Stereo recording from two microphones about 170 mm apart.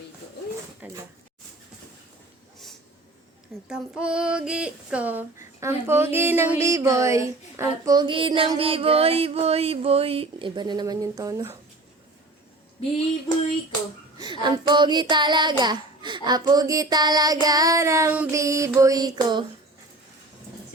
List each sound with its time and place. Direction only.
0.8 s speech: 10° right (ahead or behind)
3.7 s child singing: 5° right (ahead or behind)
14.2 s child singing: 25° right (ahead or behind)